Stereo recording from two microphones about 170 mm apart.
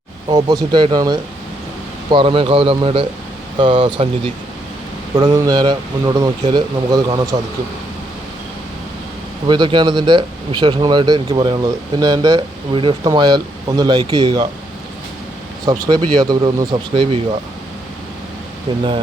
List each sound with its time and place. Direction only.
0.3 s speech: 25° right (ahead or behind)
9.5 s speech: 25° right (ahead or behind)
15.7 s speech: 20° right (ahead or behind)